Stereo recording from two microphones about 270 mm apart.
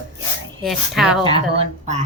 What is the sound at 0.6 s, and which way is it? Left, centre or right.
Speech, centre.